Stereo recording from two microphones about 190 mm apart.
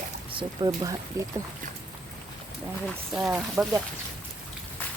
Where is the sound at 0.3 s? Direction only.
20° right (ahead or behind).